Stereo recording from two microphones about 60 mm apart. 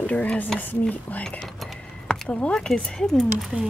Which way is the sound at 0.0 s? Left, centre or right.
Left.